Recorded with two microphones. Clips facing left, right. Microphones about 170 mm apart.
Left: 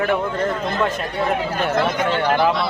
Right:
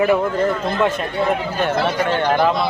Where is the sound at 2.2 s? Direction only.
5° left (ahead or behind).